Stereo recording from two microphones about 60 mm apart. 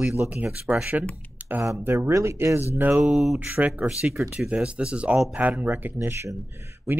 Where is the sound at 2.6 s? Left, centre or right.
Right.